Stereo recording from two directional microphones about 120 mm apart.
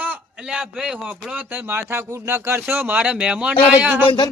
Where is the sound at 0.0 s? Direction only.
10° right (ahead or behind).